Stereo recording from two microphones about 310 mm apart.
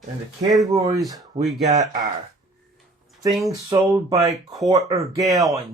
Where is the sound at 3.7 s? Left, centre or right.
Centre.